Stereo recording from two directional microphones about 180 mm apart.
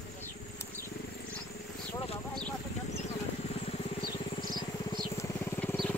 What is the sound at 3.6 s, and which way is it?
Vehicle, 35° left (ahead or behind).